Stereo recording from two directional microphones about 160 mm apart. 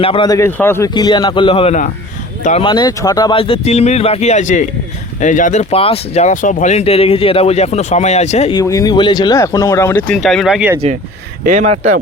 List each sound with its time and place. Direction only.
0.0 s speech: 35° left (ahead or behind)
0.3 s a man's voice: 15° left (ahead or behind)
0.9 s speech: 25° left (ahead or behind)
3.3 s speech: 35° left (ahead or behind); by 5.6 s 50° left (ahead or behind)
5.7 s speech: 35° left (ahead or behind)
8.5 s speech: 20° left (ahead or behind)
10.2 s speech: centre (ahead or behind)
11.4 s speech: 55° right (ahead or behind)